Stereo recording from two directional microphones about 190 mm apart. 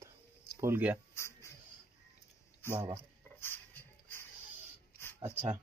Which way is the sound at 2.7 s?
20° right (ahead or behind).